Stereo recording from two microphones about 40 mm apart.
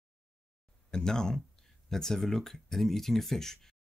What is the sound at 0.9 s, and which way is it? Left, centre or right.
Speech, centre.